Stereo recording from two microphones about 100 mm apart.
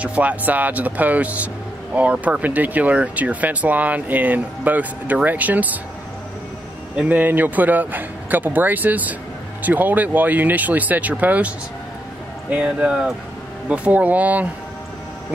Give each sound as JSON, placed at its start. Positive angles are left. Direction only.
{"t": 0.0, "sound": "speech", "side_deg": -15}
{"t": 7.0, "sound": "speech", "side_deg": -15}